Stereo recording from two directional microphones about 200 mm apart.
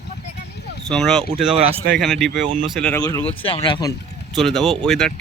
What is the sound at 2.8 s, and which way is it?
Speech, 5° left (ahead or behind).